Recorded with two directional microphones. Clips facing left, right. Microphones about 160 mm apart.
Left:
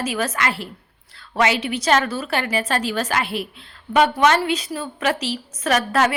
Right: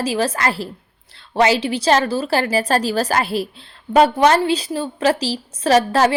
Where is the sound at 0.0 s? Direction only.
30° right (ahead or behind).